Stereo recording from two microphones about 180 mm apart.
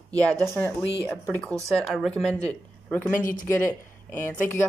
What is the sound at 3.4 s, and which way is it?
Speech, 15° left (ahead or behind).